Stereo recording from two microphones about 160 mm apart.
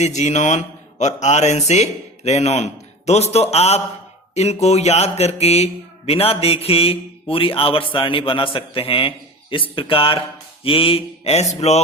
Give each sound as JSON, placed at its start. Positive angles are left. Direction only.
{"t": 0.0, "sound": "speech", "side_deg": 45}